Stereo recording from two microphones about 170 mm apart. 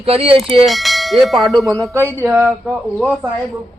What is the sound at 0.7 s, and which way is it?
Bell, centre (ahead or behind).